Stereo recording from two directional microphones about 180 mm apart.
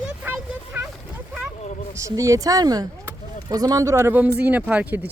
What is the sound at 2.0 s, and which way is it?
A man's voice, 15° right (ahead or behind).